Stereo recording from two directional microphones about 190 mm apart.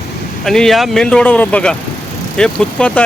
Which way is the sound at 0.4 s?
Centre (ahead or behind).